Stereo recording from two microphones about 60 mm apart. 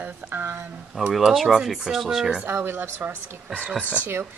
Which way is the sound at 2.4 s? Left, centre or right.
Right.